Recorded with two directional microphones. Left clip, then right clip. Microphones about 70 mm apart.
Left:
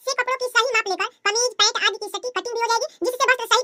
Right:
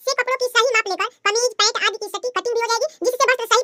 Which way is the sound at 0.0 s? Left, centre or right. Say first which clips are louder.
Right 3 dB; right.